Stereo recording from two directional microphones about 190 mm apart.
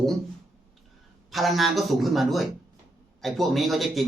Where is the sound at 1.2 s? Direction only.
Centre (ahead or behind).